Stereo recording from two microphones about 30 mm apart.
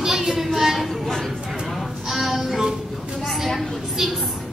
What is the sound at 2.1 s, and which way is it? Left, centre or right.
Music, centre.